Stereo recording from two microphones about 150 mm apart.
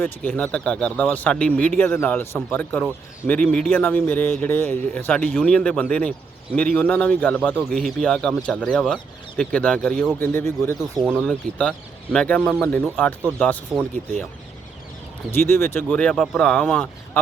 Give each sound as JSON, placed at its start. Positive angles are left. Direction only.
{"t": 0.0, "sound": "speech", "side_deg": 10}
{"t": 15.3, "sound": "speech", "side_deg": 15}